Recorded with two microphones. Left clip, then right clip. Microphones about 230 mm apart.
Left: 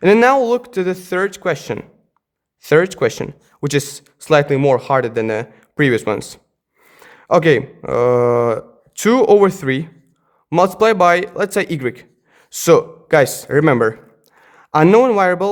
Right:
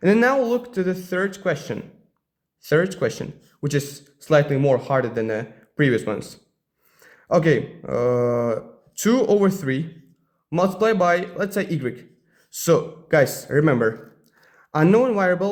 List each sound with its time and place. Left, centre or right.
0.0 s speech: left